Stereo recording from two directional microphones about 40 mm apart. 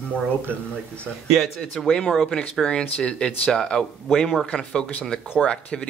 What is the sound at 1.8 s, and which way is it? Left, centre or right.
Speech, centre.